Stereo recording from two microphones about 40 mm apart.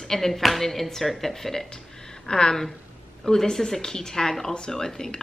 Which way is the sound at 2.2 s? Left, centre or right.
Centre.